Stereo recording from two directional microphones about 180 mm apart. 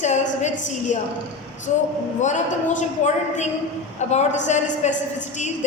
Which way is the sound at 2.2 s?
40° left (ahead or behind).